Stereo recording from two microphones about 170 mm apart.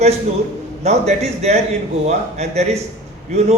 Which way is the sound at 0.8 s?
40° right (ahead or behind).